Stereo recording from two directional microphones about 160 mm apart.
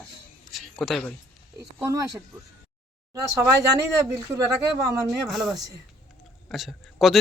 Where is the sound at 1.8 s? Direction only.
20° right (ahead or behind).